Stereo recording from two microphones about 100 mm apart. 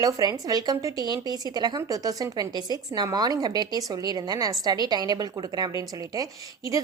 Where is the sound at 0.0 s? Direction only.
35° right (ahead or behind).